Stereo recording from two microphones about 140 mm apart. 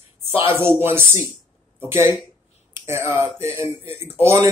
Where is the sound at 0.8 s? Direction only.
15° right (ahead or behind).